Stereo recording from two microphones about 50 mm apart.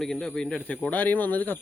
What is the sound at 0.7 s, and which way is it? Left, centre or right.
Speech, left.